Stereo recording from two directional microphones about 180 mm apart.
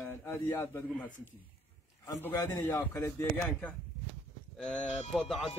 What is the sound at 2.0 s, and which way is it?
A man's voice, 20° left (ahead or behind).